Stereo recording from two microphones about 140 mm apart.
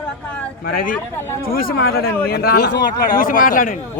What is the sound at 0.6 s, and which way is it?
Speech, 90° left.